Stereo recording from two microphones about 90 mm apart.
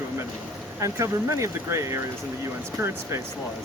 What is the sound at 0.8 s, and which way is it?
Speech, 35° right (ahead or behind).